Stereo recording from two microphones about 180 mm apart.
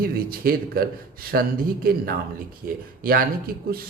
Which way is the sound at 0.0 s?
55° right (ahead or behind).